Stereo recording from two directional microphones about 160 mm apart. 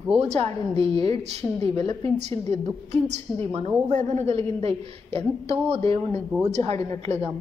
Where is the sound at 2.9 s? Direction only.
45° right (ahead or behind).